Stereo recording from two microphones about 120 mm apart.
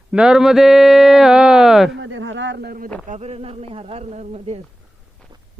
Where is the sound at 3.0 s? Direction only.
65° right (ahead or behind).